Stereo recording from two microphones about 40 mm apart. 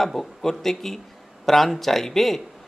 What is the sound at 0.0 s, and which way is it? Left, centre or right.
A man's voice, centre.